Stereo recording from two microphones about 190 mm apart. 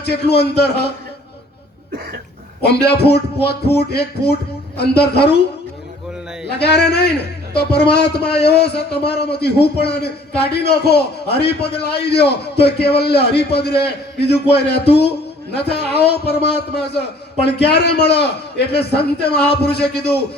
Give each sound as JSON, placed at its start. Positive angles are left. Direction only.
{"t": 0.0, "sound": "a man's voice", "side_deg": 60}
{"t": 2.6, "sound": "a man's voice", "side_deg": 60}
{"t": 6.6, "sound": "a man's voice", "side_deg": 60}